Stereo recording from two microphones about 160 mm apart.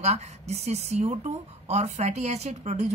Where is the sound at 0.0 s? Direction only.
45° right (ahead or behind).